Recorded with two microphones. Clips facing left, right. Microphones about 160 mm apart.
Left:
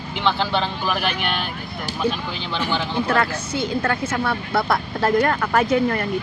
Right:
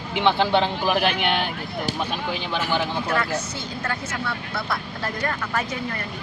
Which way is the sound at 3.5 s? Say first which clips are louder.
Left 8 dB; 60° left (ahead or behind).